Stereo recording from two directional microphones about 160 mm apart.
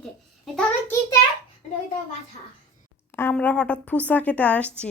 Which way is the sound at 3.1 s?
10° left (ahead or behind).